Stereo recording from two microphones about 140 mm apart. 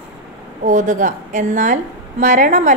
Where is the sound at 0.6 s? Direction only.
65° right (ahead or behind).